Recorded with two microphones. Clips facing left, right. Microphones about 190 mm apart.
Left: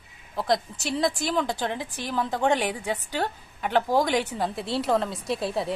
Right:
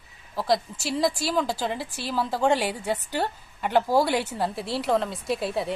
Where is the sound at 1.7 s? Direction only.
15° left (ahead or behind).